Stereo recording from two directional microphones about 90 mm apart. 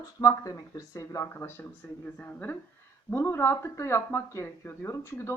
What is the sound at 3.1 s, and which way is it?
Speech, 25° left (ahead or behind).